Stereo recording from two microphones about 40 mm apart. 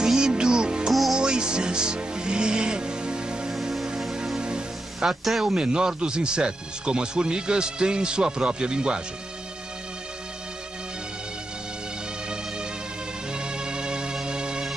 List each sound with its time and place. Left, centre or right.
0.0 s music: centre
3.7 s music: centre
5.0 s speech: centre
5.4 s speech: centre
13.3 s music: right